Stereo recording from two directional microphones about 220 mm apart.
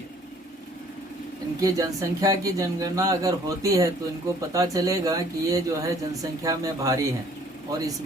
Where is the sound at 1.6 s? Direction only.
15° right (ahead or behind).